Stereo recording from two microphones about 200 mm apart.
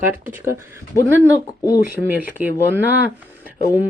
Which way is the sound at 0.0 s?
10° right (ahead or behind).